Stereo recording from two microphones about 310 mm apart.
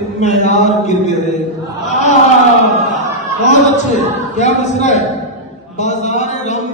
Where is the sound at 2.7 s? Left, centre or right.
Right.